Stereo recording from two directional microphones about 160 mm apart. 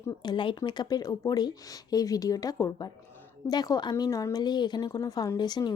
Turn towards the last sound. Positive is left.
turn(degrees=25)  # may be behind; listen again after turning